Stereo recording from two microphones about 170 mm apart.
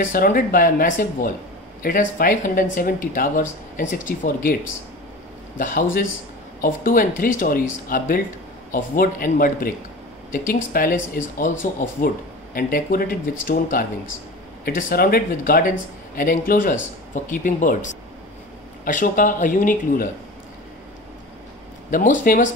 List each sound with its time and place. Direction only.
0.0 s speech: 55° left (ahead or behind)
5.6 s speech: 55° left (ahead or behind)
12.5 s speech: 60° left (ahead or behind)
18.9 s speech: 50° left (ahead or behind)
21.9 s speech: 50° left (ahead or behind)